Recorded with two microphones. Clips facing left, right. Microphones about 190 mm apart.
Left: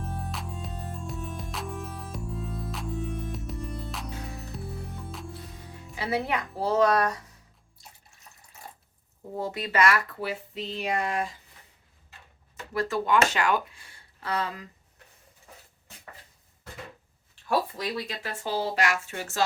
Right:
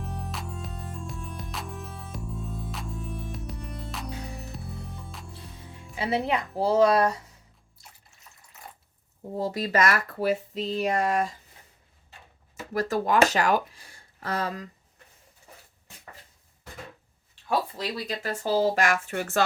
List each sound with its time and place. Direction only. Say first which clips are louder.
0.0 s music: even; centre (ahead or behind)
6.0 s a woman's voice: right 2 dB; 25° right (ahead or behind)
9.4 s speech: right 1 dB; 40° right (ahead or behind)
12.7 s speech: right 1 dB; 40° right (ahead or behind)
18.2 s speech: right 9 dB; 40° right (ahead or behind); by 19.5 s 60° right (ahead or behind)